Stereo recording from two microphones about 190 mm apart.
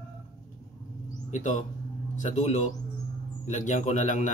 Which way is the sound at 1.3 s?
40° left (ahead or behind).